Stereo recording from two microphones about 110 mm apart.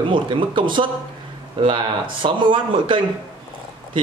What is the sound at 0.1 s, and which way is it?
Speech, 50° right (ahead or behind).